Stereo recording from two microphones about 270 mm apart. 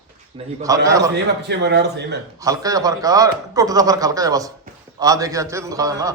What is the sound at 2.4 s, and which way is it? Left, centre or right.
A man's voice, centre.